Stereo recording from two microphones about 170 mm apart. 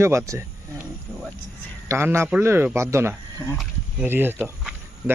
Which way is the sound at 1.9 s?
15° right (ahead or behind).